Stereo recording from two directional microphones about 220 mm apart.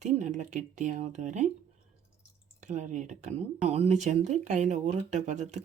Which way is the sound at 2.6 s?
35° right (ahead or behind).